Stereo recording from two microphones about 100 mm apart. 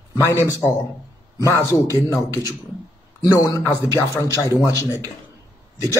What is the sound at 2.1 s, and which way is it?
Speech, 35° left (ahead or behind).